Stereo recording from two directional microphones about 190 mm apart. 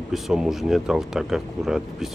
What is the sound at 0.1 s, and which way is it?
Speech, centre (ahead or behind).